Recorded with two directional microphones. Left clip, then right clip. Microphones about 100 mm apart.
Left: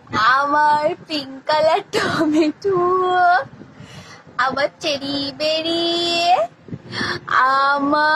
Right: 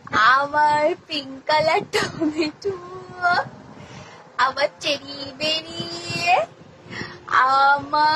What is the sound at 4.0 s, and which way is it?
Speech, 30° left (ahead or behind).